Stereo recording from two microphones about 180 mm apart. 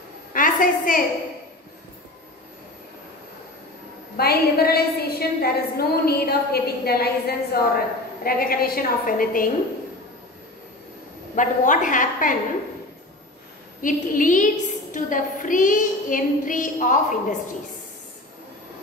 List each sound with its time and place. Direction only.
0.3 s a sound: 50° left (ahead or behind)
4.2 s a woman's voice: 60° left (ahead or behind)
11.3 s a woman's voice: 45° left (ahead or behind)
13.7 s a woman's voice: 50° left (ahead or behind)